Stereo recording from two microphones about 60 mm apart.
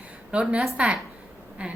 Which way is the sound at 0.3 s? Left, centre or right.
Right.